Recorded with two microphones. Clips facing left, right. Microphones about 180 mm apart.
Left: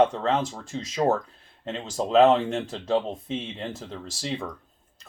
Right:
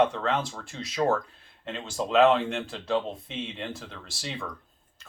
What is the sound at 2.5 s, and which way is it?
Speech, 35° left (ahead or behind).